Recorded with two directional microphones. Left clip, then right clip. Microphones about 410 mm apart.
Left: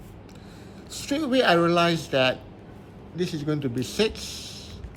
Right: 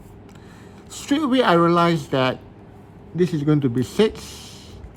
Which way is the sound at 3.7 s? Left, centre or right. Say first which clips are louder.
Right 6 dB; centre.